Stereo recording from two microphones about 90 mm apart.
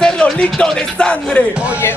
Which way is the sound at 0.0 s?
10° left (ahead or behind).